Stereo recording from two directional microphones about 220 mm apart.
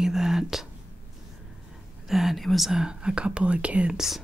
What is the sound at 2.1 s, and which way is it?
Speech, centre (ahead or behind).